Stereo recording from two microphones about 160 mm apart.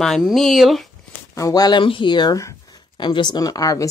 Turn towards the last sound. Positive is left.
turn(degrees=20)  # may be behind; listen again after turning